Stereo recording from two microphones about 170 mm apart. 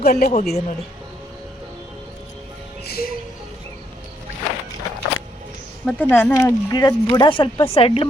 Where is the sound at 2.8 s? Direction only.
65° left (ahead or behind).